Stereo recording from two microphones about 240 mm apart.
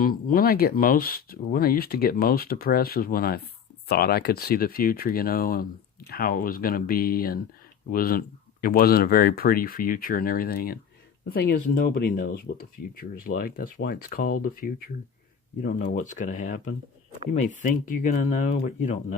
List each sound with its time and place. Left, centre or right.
0.0 s speech: left